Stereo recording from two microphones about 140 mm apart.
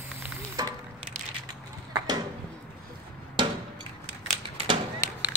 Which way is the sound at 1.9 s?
25° right (ahead or behind).